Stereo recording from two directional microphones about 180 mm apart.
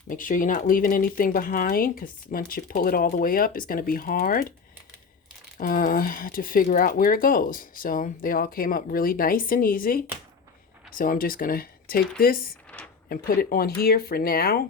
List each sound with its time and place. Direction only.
0.1 s speech: 50° left (ahead or behind)
5.5 s speech: 50° left (ahead or behind)